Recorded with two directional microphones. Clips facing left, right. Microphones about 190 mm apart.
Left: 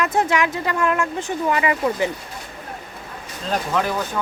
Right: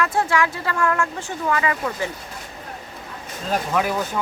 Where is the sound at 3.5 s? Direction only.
10° right (ahead or behind).